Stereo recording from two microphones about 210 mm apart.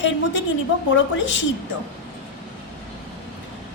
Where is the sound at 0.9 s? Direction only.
60° left (ahead or behind).